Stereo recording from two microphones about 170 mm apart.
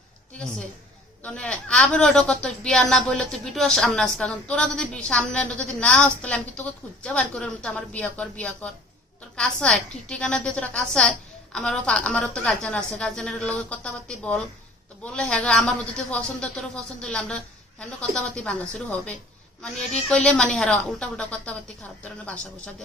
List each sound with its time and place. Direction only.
0.3 s a woman's voice: 5° left (ahead or behind)